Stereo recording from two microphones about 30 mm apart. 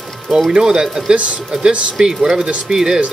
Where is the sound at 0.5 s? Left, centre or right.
Right.